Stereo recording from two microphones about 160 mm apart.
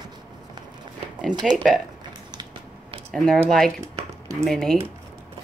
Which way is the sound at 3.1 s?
5° left (ahead or behind).